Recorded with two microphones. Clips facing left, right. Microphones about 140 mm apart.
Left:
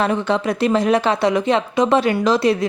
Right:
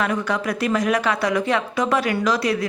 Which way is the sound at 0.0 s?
25° left (ahead or behind).